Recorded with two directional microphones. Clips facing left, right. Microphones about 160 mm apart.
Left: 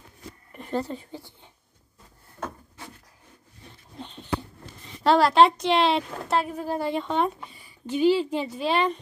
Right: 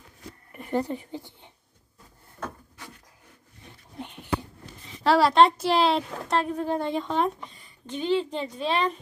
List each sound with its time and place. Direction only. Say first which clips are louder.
0.5 s speech: right 2 dB; 10° right (ahead or behind)
4.0 s a sound: right 1 dB; 10° right (ahead or behind)
5.0 s a woman's voice: left 1 dB; centre (ahead or behind)